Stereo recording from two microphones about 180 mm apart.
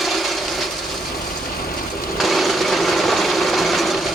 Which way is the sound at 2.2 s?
Centre (ahead or behind).